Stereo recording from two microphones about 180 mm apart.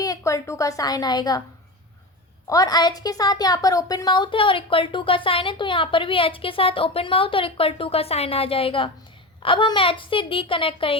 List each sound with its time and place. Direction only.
0.0 s a woman's voice: 20° left (ahead or behind)
2.5 s a woman's voice: 20° left (ahead or behind)